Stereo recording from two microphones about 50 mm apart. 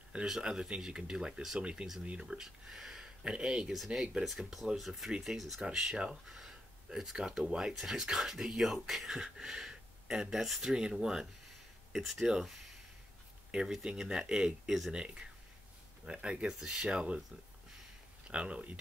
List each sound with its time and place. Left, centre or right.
0.3 s speech: centre
1.6 s speech: right
3.7 s speech: centre
4.0 s speech: centre
16.5 s speech: centre
18.3 s speech: right